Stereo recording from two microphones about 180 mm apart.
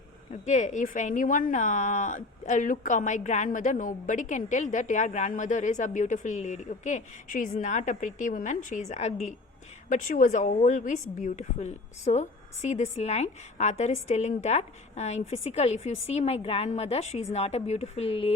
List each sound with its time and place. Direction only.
0.4 s a woman's voice: 40° left (ahead or behind)